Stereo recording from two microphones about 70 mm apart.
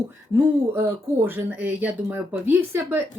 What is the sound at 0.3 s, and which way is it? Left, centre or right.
Speech, right.